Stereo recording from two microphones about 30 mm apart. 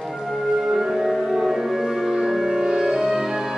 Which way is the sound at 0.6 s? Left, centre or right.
Centre.